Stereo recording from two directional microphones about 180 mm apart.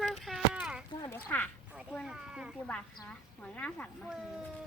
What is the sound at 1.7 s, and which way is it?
Speech, 5° right (ahead or behind).